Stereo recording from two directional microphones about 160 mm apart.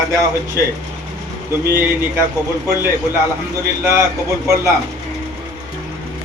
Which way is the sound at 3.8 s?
15° right (ahead or behind).